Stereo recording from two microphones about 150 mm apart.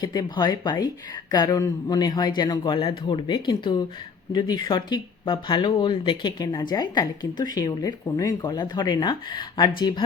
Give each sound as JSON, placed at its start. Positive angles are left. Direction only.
{"t": 0.0, "sound": "speech", "side_deg": 25}